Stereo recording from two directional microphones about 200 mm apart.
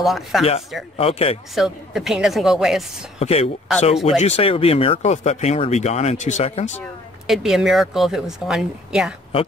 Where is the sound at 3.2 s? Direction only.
30° left (ahead or behind).